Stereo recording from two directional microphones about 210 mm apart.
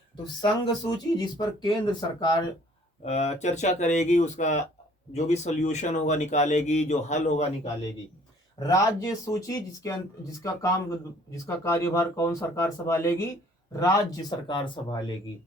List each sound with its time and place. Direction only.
0.4 s speech: 20° left (ahead or behind)
8.5 s speech: 15° left (ahead or behind)